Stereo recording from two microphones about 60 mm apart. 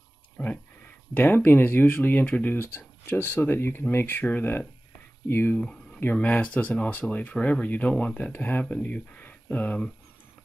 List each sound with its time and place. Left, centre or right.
0.4 s speech: left
6.1 s speech: left
8.3 s speech: left